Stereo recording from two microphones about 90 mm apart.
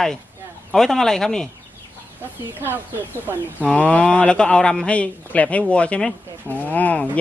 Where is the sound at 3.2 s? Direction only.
20° right (ahead or behind).